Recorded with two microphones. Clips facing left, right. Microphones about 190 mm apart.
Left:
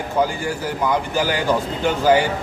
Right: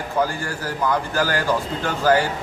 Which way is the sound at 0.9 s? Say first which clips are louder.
Left 1 dB; 15° left (ahead or behind).